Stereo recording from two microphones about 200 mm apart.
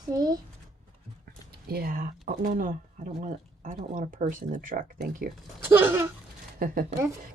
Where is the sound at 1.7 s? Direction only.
50° right (ahead or behind).